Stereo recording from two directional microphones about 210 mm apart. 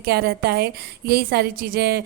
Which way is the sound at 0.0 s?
50° right (ahead or behind).